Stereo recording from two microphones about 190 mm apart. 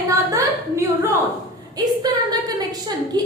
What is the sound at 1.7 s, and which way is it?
A woman's voice, 20° right (ahead or behind).